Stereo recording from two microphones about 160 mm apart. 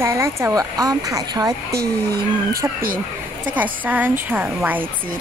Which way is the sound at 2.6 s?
15° right (ahead or behind).